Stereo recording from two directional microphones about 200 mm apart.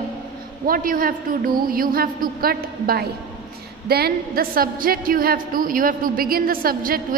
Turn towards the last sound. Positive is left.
turn(degrees=-45)  # may be behind; listen again after turning